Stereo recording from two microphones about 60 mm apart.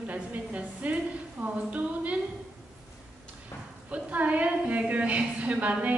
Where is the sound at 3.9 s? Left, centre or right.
Right.